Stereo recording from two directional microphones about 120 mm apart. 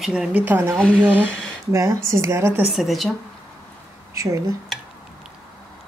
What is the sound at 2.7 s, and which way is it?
Speech, centre (ahead or behind).